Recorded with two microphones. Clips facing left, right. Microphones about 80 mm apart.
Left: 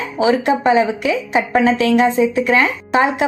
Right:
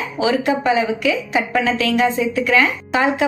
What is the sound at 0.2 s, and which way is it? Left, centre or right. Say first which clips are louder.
A woman's voice: left 3 dB; left.